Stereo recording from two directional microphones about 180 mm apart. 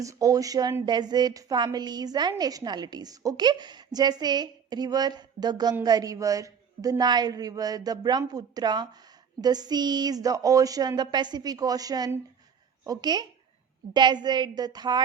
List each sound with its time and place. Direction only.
0.0 s a woman's voice: 20° right (ahead or behind)